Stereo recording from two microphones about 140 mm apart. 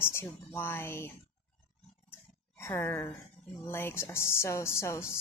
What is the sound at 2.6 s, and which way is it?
A woman's voice, 20° left (ahead or behind).